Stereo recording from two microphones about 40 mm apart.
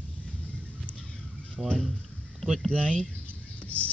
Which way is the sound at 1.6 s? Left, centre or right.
Centre.